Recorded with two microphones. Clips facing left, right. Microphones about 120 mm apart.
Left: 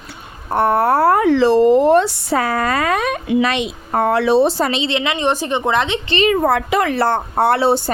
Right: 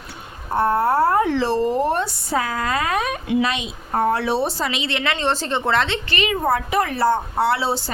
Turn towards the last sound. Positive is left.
turn(degrees=55)  # may be behind; listen again after turning